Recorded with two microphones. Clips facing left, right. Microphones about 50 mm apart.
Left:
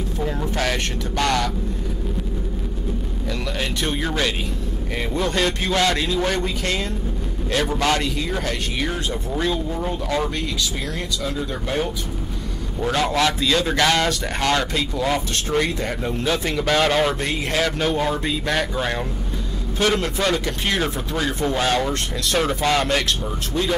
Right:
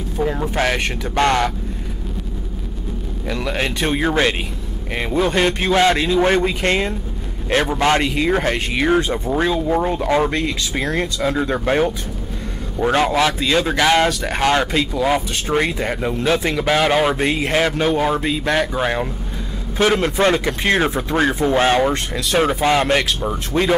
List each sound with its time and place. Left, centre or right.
0.2 s speech: centre
1.1 s speech: right
3.5 s speech: right
7.6 s speech: right
8.0 s speech: right
9.7 s speech: right
10.0 s speech: right
10.8 s speech: right
12.8 s speech: right
15.5 s speech: right
16.5 s speech: centre
19.8 s speech: right
22.8 s speech: right